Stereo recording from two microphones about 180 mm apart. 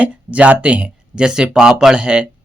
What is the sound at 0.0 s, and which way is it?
Speech, 5° right (ahead or behind).